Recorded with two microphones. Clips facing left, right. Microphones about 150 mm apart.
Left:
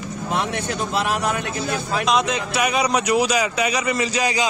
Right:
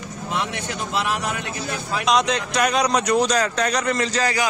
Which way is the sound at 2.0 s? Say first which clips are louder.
Right 2 dB; centre (ahead or behind).